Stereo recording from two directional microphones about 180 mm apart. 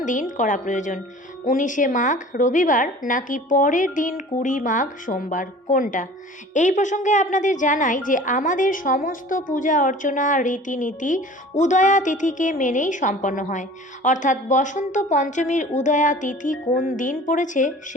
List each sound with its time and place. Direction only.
0.0 s a woman's voice: 45° left (ahead or behind)